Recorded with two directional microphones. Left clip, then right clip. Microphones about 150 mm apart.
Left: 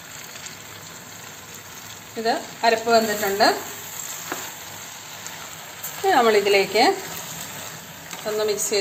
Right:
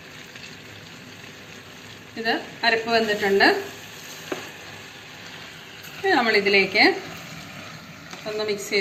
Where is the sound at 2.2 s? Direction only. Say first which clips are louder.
Left 2 dB; 70° left (ahead or behind).